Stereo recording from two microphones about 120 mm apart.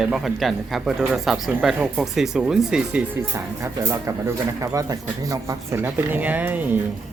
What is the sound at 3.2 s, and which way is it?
Speech, 25° right (ahead or behind).